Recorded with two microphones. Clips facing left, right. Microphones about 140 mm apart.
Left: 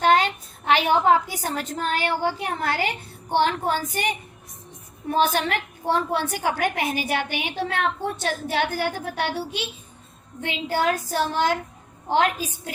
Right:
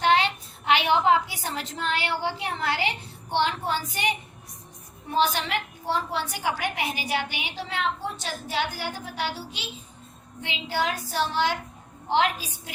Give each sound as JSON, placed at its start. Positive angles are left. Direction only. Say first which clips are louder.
{"t": 0.0, "sound": "a woman's voice", "louder": "left 3 dB", "side_deg": 45}
{"t": 10.4, "sound": "a woman's voice", "louder": "left 5 dB", "side_deg": 50}